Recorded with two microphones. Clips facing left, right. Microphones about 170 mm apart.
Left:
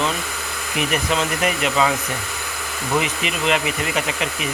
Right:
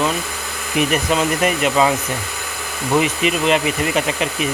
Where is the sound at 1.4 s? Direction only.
25° right (ahead or behind).